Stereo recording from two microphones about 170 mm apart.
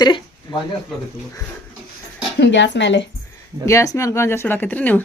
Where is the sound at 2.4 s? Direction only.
90° left.